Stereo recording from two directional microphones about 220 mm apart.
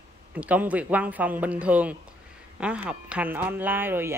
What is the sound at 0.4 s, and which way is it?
Speech, 5° right (ahead or behind).